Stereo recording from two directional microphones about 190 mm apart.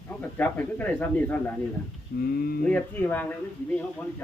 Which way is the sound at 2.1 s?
50° left (ahead or behind).